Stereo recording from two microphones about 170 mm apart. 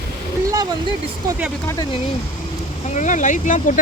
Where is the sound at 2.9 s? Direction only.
45° left (ahead or behind).